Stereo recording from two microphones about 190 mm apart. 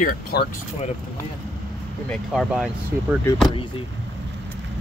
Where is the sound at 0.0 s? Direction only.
55° left (ahead or behind).